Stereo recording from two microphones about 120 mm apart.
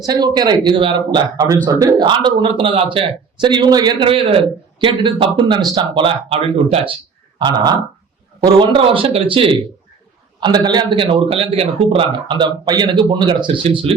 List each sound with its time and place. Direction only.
0.0 s a man's voice: 35° right (ahead or behind); by 6.9 s 55° right (ahead or behind)
7.3 s a man's voice: 40° right (ahead or behind)